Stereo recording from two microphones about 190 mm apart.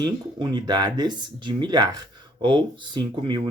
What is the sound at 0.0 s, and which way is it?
Speech, 25° right (ahead or behind).